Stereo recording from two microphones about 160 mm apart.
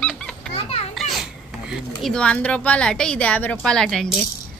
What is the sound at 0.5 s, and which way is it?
Children playing, 40° left (ahead or behind).